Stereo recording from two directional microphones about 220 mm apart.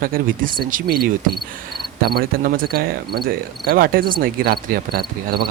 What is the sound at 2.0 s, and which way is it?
Cricket, 45° right (ahead or behind).